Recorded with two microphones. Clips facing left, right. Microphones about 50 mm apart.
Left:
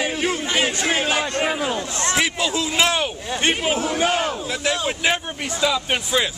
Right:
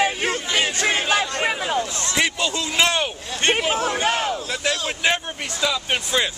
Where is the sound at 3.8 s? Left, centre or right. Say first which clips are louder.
Left 1 dB; right.